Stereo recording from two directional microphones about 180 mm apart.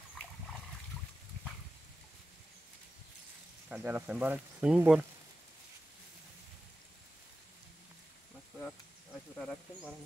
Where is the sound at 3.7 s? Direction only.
10° right (ahead or behind).